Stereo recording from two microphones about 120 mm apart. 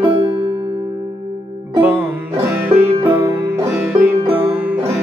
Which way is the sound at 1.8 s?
15° right (ahead or behind).